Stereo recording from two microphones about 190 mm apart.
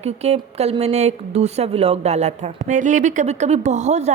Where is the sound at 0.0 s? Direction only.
35° right (ahead or behind).